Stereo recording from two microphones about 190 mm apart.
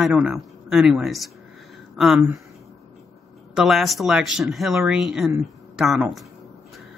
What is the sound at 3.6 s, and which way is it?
Speech, centre (ahead or behind).